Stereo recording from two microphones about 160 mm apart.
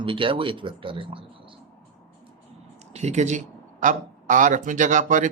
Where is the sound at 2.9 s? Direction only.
45° right (ahead or behind).